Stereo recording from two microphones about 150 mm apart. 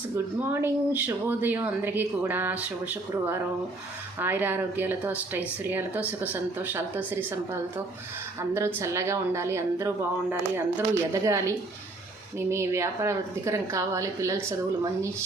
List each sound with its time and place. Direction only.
0.6 s speech: 10° right (ahead or behind)
8.4 s a woman's voice: 20° right (ahead or behind)